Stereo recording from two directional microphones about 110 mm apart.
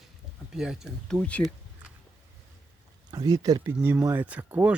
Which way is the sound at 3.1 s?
35° right (ahead or behind).